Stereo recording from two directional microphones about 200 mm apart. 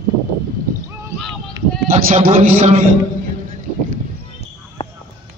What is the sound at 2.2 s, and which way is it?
Speech, 35° right (ahead or behind).